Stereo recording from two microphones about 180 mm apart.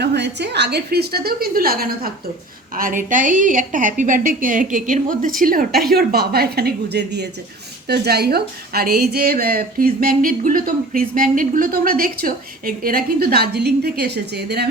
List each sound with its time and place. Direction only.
0.0 s a woman's voice: 70° right (ahead or behind)